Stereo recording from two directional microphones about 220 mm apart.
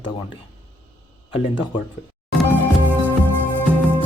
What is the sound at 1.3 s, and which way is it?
Speech, 25° left (ahead or behind).